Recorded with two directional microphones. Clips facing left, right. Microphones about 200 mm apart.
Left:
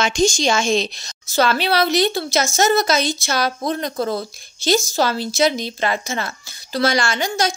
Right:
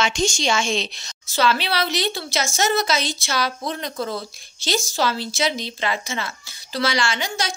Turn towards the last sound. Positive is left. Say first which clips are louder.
# left 4 dB
turn(degrees=45)  # may be behind; listen again after turning